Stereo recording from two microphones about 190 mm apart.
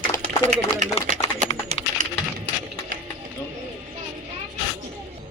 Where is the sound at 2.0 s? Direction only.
40° right (ahead or behind).